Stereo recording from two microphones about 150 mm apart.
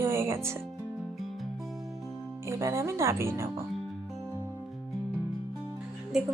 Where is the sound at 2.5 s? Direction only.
20° right (ahead or behind).